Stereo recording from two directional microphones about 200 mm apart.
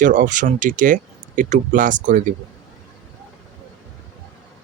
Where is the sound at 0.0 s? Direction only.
40° right (ahead or behind).